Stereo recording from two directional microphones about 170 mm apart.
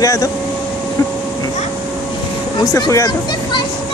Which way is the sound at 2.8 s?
20° left (ahead or behind).